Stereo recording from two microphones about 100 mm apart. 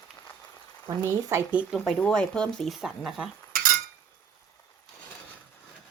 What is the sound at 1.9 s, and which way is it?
Speech, 10° left (ahead or behind).